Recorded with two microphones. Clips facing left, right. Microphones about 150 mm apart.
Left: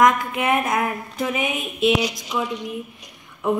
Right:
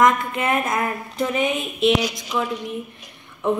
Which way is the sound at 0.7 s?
5° left (ahead or behind).